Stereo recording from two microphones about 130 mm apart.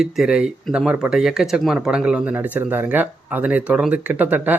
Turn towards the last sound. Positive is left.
turn(degrees=-15)  # may be behind; listen again after turning